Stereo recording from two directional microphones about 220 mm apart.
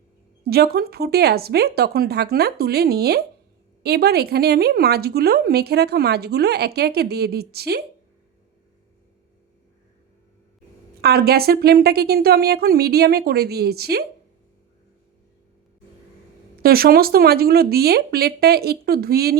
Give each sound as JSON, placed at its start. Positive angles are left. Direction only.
{"t": 0.4, "sound": "speech", "side_deg": -45}
{"t": 11.0, "sound": "speech", "side_deg": -45}
{"t": 16.6, "sound": "speech", "side_deg": -45}